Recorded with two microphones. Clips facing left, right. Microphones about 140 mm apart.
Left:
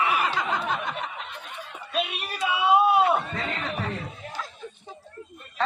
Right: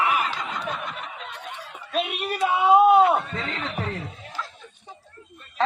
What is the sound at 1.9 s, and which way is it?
Speech, 45° right (ahead or behind).